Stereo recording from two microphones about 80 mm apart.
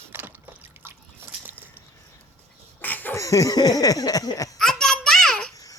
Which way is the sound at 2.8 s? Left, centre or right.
Left.